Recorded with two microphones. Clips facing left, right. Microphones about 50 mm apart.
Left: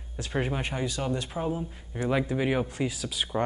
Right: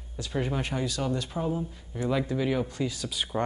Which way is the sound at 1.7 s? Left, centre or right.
Left.